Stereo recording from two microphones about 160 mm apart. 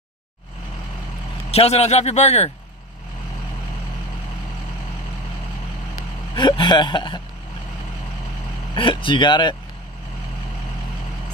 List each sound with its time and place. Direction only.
1.5 s speech: 40° left (ahead or behind)
5.9 s vehicle: 30° left (ahead or behind)
8.7 s speech: 30° left (ahead or behind)